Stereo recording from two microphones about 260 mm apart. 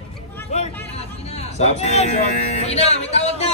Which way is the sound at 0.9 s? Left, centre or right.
Left.